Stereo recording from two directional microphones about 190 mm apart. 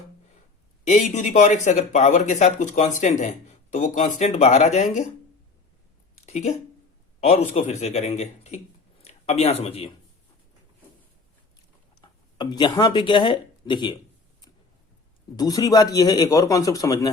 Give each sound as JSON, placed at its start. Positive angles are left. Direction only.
{"t": 0.9, "sound": "speech", "side_deg": 40}
{"t": 6.2, "sound": "speech", "side_deg": 35}
{"t": 11.9, "sound": "speech", "side_deg": 20}
{"t": 15.4, "sound": "a man's voice", "side_deg": 20}